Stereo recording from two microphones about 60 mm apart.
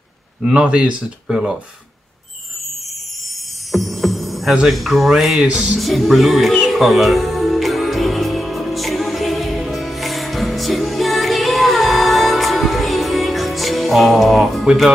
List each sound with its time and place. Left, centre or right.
0.4 s speech: centre
1.3 s music: centre
3.7 s music: centre
4.6 s speech: centre
5.4 s music: centre
5.8 s speech: centre
6.7 s music: centre